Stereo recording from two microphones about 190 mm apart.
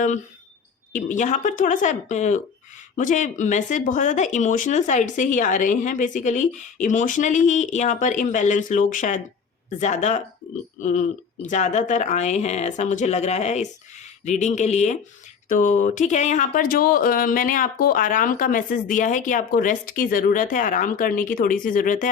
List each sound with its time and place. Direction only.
0.9 s speech: 40° left (ahead or behind)